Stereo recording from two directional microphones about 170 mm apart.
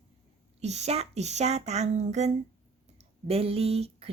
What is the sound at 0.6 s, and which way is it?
Speech, 40° right (ahead or behind).